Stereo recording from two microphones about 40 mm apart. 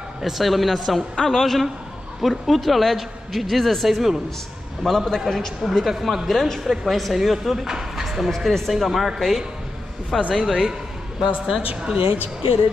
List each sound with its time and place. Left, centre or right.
0.2 s a man's voice: centre
4.8 s a man's voice: centre
6.6 s a man's voice: centre
11.2 s speech: centre